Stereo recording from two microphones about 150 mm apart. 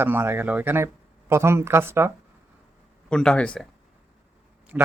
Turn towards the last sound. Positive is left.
turn(degrees=-10)  # may be behind; listen again after turning